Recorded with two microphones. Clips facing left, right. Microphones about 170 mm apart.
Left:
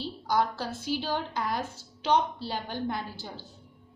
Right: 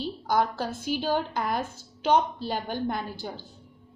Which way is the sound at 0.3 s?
50° right (ahead or behind).